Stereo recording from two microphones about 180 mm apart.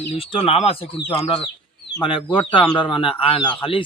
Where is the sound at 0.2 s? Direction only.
30° left (ahead or behind).